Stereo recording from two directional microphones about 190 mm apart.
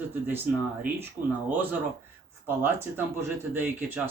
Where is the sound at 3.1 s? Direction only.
10° right (ahead or behind).